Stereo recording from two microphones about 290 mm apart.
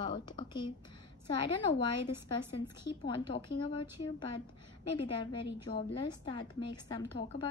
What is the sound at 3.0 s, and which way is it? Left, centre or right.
A woman's voice, centre.